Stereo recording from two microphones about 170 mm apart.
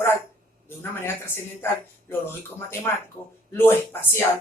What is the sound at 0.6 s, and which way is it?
Speech, 15° left (ahead or behind).